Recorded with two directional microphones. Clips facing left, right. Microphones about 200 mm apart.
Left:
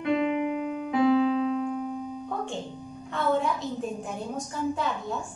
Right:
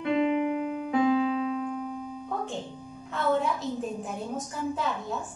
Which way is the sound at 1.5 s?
Centre (ahead or behind).